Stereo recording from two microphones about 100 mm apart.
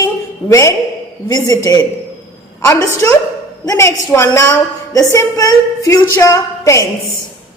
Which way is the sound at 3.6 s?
35° left (ahead or behind).